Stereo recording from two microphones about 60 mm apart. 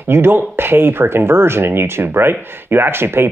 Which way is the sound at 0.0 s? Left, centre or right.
Right.